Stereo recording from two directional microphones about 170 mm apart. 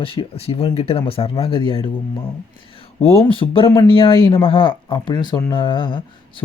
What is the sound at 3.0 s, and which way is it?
Speech, 35° left (ahead or behind).